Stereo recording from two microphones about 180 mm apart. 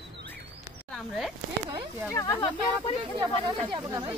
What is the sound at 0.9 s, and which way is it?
Speech, centre (ahead or behind).